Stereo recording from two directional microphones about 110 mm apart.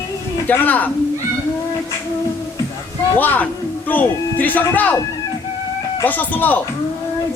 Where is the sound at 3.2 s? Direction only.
15° left (ahead or behind).